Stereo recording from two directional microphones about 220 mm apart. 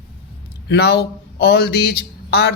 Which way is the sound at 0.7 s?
50° left (ahead or behind).